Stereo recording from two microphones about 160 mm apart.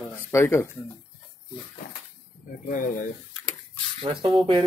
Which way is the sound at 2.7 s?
60° left (ahead or behind).